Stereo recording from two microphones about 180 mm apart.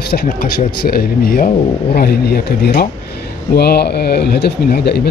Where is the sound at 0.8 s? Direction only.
55° left (ahead or behind).